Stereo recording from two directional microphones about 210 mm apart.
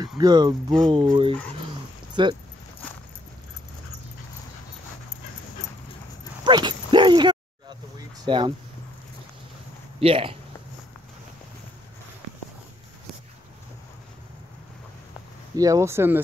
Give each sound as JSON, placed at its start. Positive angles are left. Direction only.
{"t": 0.2, "sound": "speech", "side_deg": -20}
{"t": 6.4, "sound": "dog", "side_deg": -20}
{"t": 8.3, "sound": "speech", "side_deg": -25}
{"t": 9.9, "sound": "speech", "side_deg": -25}
{"t": 15.5, "sound": "speech", "side_deg": -15}